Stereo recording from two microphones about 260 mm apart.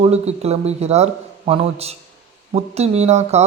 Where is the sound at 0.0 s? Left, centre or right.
Right.